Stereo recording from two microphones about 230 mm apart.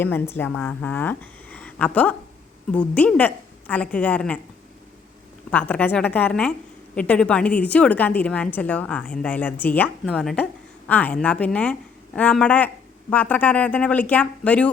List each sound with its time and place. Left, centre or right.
0.0 s a woman's voice: centre
5.5 s a woman's voice: centre